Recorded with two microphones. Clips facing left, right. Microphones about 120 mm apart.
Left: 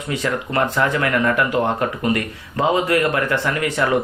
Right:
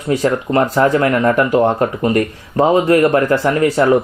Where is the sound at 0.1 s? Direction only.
35° right (ahead or behind).